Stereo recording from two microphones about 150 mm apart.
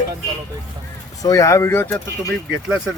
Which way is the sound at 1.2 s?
25° left (ahead or behind).